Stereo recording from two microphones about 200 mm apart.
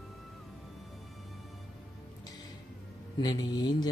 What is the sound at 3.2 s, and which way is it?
Speech, 20° left (ahead or behind).